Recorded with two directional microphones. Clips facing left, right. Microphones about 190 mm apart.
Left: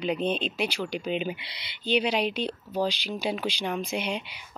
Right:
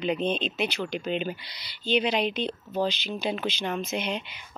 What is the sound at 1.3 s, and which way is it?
Speech, 25° left (ahead or behind).